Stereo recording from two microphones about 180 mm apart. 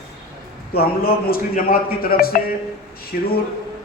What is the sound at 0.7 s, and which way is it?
A man's voice, 55° left (ahead or behind).